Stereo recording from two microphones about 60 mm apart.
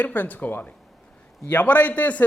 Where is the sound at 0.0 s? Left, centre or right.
Left.